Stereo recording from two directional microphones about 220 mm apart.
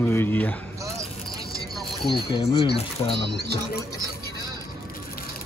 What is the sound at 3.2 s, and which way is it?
Speech, 50° right (ahead or behind).